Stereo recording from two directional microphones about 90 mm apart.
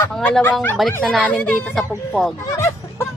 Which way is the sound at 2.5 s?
35° left (ahead or behind).